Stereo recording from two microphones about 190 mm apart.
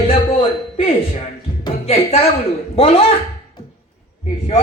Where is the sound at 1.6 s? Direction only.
30° left (ahead or behind).